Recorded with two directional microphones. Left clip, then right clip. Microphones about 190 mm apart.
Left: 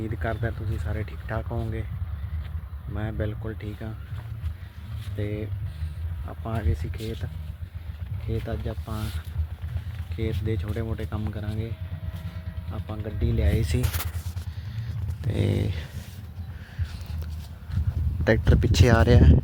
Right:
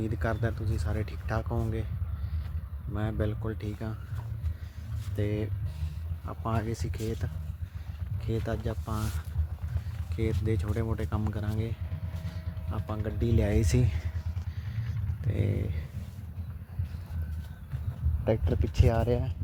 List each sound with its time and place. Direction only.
0.0 s speech: 5° right (ahead or behind)
2.9 s speech: 10° right (ahead or behind)
5.1 s speech: 25° right (ahead or behind)
6.2 s speech: 15° right (ahead or behind)
8.3 s speech: 10° right (ahead or behind)
10.2 s speech: 5° right (ahead or behind)
12.7 s speech: 15° right (ahead or behind)
13.3 s speech: 40° right (ahead or behind)
15.3 s speech: 20° left (ahead or behind)
18.3 s speech: 30° left (ahead or behind)